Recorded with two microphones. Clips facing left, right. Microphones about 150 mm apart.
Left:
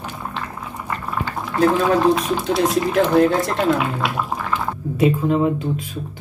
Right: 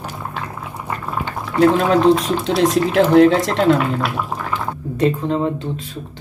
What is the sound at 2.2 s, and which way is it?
Speech, 90° right.